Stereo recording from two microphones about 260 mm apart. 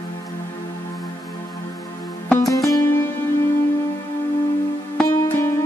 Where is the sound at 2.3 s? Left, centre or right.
Centre.